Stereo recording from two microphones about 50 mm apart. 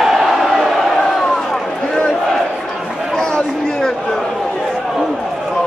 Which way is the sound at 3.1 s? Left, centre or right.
Centre.